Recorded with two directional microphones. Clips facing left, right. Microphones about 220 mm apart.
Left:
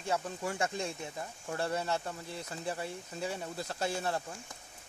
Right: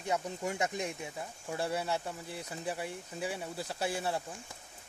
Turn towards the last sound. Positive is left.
turn(degrees=-10)  # may be behind; listen again after turning